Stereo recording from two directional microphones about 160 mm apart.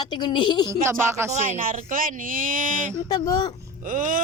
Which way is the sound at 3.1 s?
25° left (ahead or behind).